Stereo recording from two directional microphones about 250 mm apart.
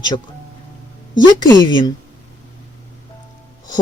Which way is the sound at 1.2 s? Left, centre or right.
Centre.